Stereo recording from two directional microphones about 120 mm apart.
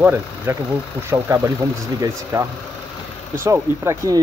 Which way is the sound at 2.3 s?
25° right (ahead or behind).